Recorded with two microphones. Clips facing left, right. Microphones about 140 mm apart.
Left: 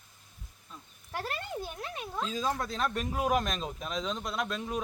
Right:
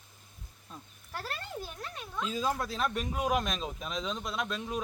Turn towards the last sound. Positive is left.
turn(degrees=0)  # may be behind; listen again after turning